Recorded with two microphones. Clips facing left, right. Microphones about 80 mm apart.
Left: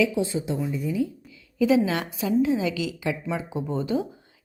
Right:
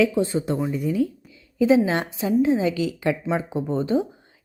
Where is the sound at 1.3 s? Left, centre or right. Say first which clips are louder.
Right 3 dB; right.